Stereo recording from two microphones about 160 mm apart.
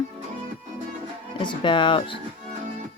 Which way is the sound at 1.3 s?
30° left (ahead or behind).